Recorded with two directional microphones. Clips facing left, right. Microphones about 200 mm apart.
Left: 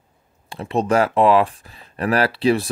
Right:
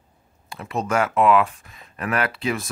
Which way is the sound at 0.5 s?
30° left (ahead or behind).